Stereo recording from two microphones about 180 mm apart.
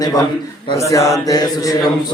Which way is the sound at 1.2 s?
20° left (ahead or behind).